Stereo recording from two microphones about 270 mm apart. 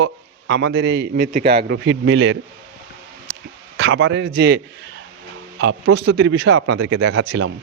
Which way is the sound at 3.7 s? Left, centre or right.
Right.